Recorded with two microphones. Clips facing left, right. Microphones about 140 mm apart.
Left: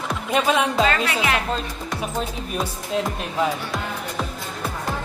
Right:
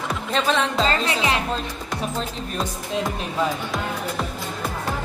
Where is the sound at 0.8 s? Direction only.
30° right (ahead or behind).